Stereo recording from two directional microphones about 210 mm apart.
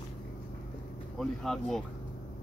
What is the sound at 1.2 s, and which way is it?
Speech, centre (ahead or behind).